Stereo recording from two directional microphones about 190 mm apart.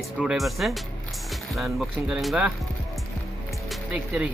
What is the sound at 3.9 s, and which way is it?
Speech, 5° right (ahead or behind).